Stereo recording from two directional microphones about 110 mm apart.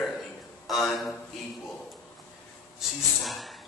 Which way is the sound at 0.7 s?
Centre (ahead or behind).